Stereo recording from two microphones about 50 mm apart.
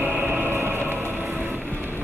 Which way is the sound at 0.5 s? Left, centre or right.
Right.